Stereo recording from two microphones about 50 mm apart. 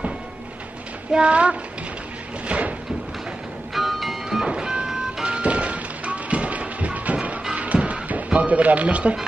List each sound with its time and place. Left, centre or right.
1.1 s speech: right
2.4 s cupboard open or close: right
3.7 s music: centre
4.5 s music: centre
5.2 s music: right